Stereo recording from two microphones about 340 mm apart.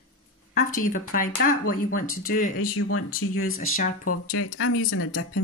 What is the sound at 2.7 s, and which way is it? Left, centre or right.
Speech, left.